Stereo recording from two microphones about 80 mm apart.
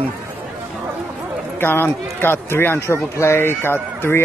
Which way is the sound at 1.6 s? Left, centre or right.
Left.